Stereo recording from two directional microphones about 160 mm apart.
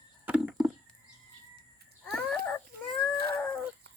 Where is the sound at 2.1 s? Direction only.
5° left (ahead or behind).